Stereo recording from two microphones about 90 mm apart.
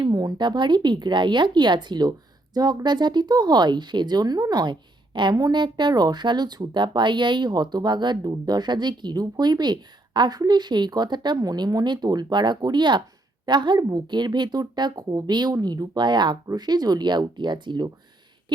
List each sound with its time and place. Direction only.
0.0 s speech: 45° right (ahead or behind); by 17.8 s 60° right (ahead or behind)